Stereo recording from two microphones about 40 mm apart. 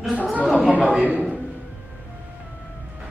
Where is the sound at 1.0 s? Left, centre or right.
Right.